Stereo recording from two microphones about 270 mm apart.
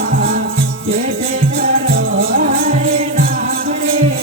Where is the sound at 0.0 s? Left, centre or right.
Right.